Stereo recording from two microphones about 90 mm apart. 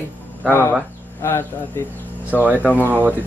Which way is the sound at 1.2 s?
25° left (ahead or behind).